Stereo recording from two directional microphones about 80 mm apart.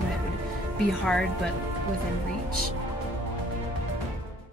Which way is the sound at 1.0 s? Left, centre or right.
Centre.